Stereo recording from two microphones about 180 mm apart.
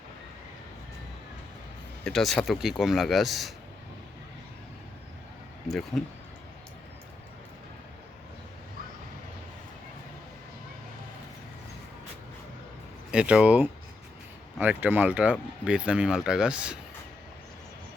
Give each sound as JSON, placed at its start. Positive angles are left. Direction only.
{"t": 2.0, "sound": "speech", "side_deg": 0}
{"t": 5.6, "sound": "speech", "side_deg": 0}
{"t": 13.1, "sound": "speech", "side_deg": -5}